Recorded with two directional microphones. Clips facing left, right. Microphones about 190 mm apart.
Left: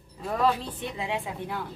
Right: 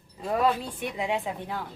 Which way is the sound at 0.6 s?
15° right (ahead or behind).